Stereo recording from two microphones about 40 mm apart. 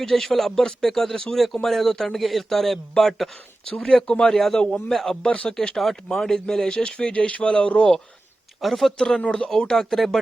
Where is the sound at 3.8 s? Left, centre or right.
Centre.